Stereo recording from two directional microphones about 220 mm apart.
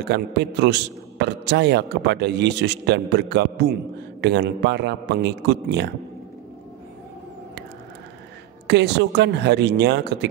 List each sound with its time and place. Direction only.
0.0 s a man's voice: 50° right (ahead or behind)
8.6 s a man's voice: 50° right (ahead or behind)